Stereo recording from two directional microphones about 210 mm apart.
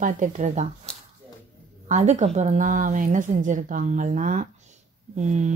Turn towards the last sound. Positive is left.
turn(degrees=-35)  # may be behind; listen again after turning